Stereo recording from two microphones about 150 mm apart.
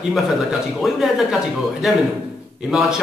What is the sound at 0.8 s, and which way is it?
Speech, centre (ahead or behind).